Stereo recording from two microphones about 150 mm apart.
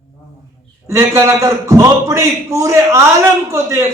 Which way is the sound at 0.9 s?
20° right (ahead or behind).